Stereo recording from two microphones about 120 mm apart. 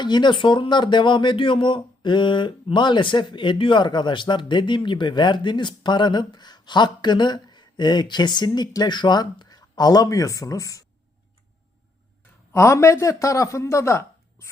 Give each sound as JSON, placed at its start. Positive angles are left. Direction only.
{"t": 0.0, "sound": "speech", "side_deg": 40}
{"t": 12.5, "sound": "speech", "side_deg": 25}